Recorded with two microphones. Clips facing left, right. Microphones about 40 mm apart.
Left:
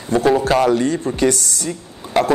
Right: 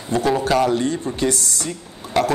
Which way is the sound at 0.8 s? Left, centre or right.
Left.